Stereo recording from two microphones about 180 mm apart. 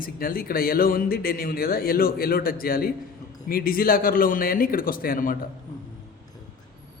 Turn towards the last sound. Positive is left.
turn(degrees=50)  # may be behind; listen again after turning